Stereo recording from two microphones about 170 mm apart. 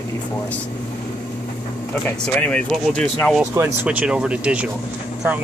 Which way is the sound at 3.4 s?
10° right (ahead or behind).